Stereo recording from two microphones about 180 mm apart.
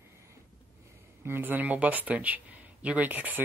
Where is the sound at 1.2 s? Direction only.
10° right (ahead or behind).